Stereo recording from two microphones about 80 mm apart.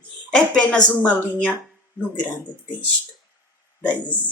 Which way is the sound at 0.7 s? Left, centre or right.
Left.